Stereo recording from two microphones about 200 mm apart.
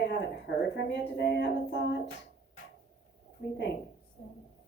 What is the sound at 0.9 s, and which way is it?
A woman's voice, 60° left (ahead or behind).